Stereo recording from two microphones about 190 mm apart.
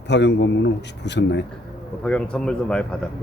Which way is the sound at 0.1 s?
65° left (ahead or behind).